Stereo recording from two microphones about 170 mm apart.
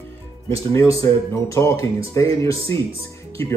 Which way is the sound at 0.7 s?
20° left (ahead or behind).